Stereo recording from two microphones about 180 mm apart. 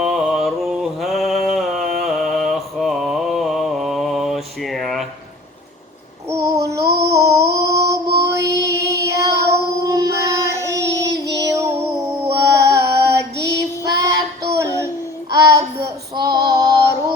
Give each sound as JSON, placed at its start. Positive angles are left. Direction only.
{"t": 0.0, "sound": "a sound", "side_deg": 0}
{"t": 6.2, "sound": "child singing", "side_deg": -15}
{"t": 7.1, "sound": "a sound", "side_deg": -15}
{"t": 8.2, "sound": "music", "side_deg": -15}
{"t": 8.7, "sound": "child singing", "side_deg": -15}
{"t": 11.3, "sound": "female singing", "side_deg": -15}
{"t": 13.5, "sound": "child singing", "side_deg": -20}
{"t": 15.3, "sound": "child singing", "side_deg": -20}